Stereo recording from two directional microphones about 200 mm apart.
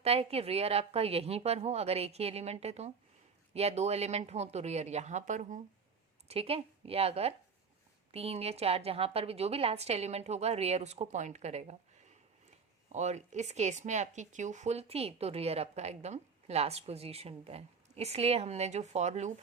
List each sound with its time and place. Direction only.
0.0 s a woman's voice: 30° right (ahead or behind)